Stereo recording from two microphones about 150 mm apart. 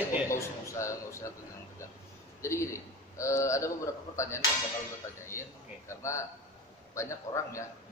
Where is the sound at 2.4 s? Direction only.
20° left (ahead or behind).